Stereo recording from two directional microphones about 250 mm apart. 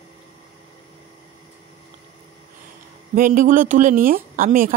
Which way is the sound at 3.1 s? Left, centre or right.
Right.